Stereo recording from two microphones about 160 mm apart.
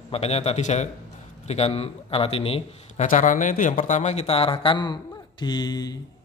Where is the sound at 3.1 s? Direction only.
50° left (ahead or behind); by 5.9 s 25° left (ahead or behind).